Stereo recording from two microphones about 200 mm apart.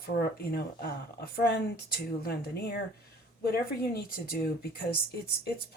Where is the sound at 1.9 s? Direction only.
50° left (ahead or behind).